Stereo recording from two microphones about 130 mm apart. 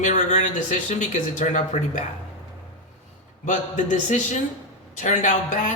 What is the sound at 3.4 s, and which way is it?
A woman's voice, 70° left (ahead or behind).